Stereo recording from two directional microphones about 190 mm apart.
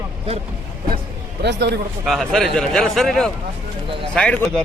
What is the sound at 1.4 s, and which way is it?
Speech, 60° right (ahead or behind).